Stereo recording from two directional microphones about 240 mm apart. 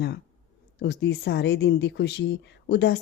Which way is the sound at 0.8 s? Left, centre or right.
Left.